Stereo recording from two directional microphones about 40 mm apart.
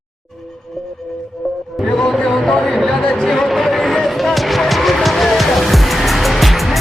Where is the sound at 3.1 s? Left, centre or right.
Centre.